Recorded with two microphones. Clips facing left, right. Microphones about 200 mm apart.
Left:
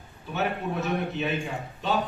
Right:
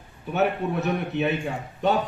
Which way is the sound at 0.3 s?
60° right (ahead or behind).